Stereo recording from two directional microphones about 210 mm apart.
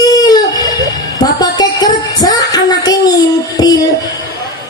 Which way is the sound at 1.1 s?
20° left (ahead or behind).